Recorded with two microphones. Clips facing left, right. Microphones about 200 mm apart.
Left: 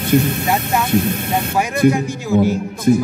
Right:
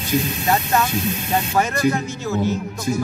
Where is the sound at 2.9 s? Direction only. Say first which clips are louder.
Left 9 dB; 55° left (ahead or behind).